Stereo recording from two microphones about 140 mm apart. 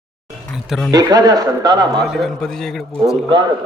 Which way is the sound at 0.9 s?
25° right (ahead or behind).